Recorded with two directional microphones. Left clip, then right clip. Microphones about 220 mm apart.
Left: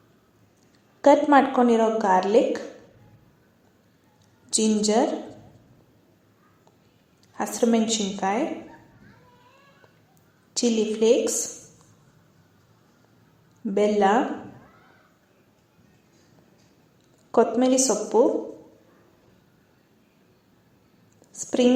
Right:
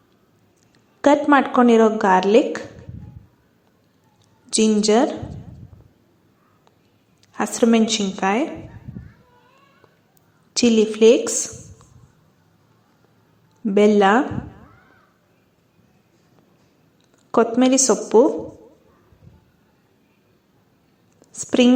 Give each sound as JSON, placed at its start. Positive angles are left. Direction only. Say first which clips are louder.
{"t": 1.0, "sound": "a woman's voice", "louder": "right 1 dB", "side_deg": -30}
{"t": 4.4, "sound": "a woman's voice", "louder": "right 6 dB", "side_deg": -25}
{"t": 7.3, "sound": "a woman's voice", "louder": "right 5 dB", "side_deg": -30}
{"t": 10.5, "sound": "a woman's voice", "louder": "right 6 dB", "side_deg": -30}
{"t": 13.7, "sound": "a woman's voice", "louder": "right 6 dB", "side_deg": -30}
{"t": 17.3, "sound": "a woman's voice", "louder": "right 3 dB", "side_deg": -30}
{"t": 21.2, "sound": "a sound", "louder": "right 5 dB", "side_deg": -30}